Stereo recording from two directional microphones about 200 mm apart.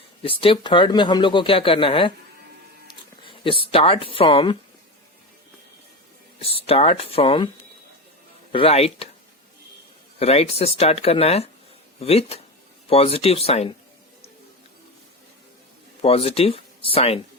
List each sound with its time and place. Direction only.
0.2 s speech: 25° left (ahead or behind)
6.6 s speech: 30° left (ahead or behind)
8.5 s speech: 30° left (ahead or behind)
10.2 s speech: 30° left (ahead or behind)
16.0 s speech: 30° left (ahead or behind)